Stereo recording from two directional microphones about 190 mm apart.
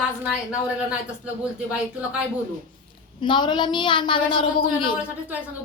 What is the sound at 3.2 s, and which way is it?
A woman's voice, 25° left (ahead or behind).